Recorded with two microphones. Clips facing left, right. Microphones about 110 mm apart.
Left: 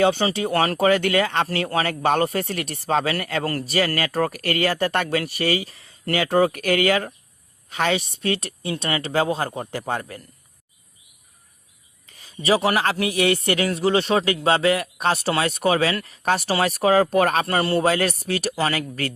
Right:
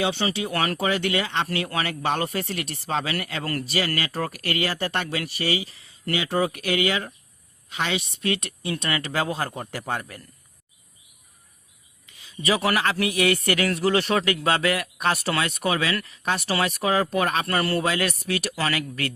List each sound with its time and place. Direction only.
0.0 s a man's voice: 40° left (ahead or behind)
12.1 s a sound: 45° left (ahead or behind)
12.5 s a man's voice: 25° left (ahead or behind)
17.4 s a man's voice: 25° left (ahead or behind)
17.8 s speech: 35° left (ahead or behind)